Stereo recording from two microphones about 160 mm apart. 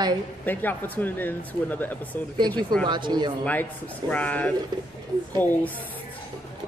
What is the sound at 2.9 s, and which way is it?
Speech, 30° right (ahead or behind).